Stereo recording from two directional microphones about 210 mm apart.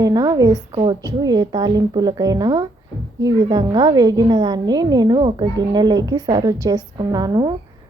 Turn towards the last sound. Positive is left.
turn(degrees=-20)  # may be behind; listen again after turning